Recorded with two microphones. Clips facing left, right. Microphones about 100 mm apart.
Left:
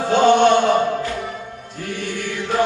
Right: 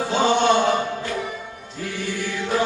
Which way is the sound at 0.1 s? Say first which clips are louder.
Left 6 dB; 55° left (ahead or behind).